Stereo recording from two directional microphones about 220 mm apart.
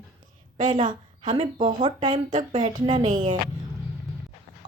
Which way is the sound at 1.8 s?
20° right (ahead or behind).